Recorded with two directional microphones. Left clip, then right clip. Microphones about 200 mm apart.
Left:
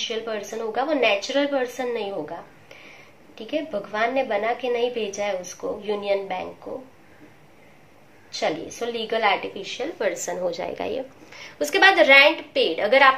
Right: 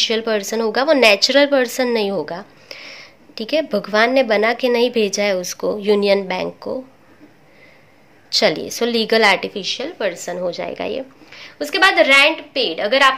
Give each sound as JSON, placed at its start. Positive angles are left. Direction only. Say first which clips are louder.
{"t": 0.0, "sound": "a woman's voice", "louder": "right 10 dB", "side_deg": -55}
{"t": 8.4, "sound": "a woman's voice", "louder": "right 9 dB", "side_deg": -55}
{"t": 9.9, "sound": "a woman's voice", "louder": "right 3 dB", "side_deg": -25}